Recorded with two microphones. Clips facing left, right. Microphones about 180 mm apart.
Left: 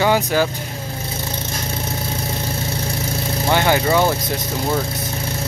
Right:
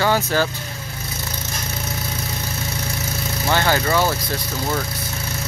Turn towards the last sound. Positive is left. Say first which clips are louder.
# left 3 dB
turn(degrees=15)  # may be behind; listen again after turning